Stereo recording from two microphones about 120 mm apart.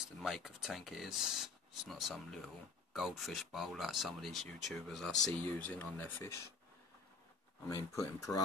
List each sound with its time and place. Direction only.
0.2 s speech: centre (ahead or behind); by 6.4 s 20° left (ahead or behind)
7.7 s speech: 25° left (ahead or behind)